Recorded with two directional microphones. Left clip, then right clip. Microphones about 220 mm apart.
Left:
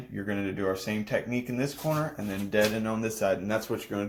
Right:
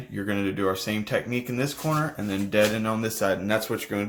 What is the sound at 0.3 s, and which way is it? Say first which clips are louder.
Speech: right 4 dB; 20° right (ahead or behind).